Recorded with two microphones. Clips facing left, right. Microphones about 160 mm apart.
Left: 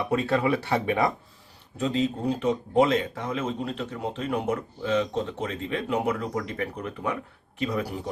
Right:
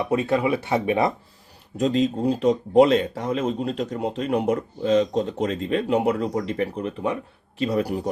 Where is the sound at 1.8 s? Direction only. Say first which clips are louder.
Right 5 dB; 35° right (ahead or behind).